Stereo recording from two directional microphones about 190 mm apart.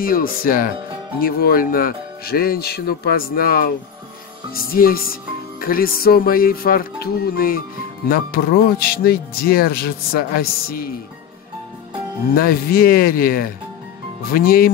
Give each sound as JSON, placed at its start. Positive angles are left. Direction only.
{"t": 0.0, "sound": "speech", "side_deg": 50}
{"t": 12.4, "sound": "speech", "side_deg": 50}